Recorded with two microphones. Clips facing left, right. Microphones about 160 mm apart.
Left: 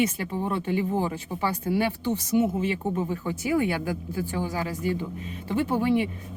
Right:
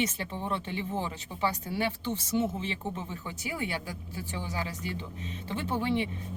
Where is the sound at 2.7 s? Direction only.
45° left (ahead or behind).